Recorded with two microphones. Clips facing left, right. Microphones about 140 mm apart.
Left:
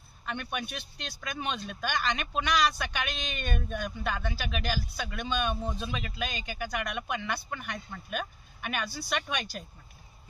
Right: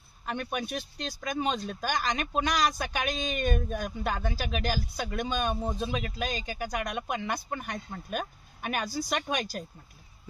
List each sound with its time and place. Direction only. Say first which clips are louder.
0.3 s speech: right 3 dB; 35° right (ahead or behind)